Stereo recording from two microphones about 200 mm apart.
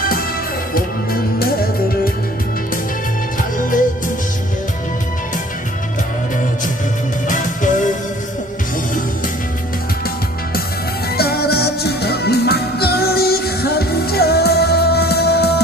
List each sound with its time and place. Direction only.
0.0 s music: 45° left (ahead or behind)
7.3 s music: 40° left (ahead or behind)
11.2 s music: 50° left (ahead or behind)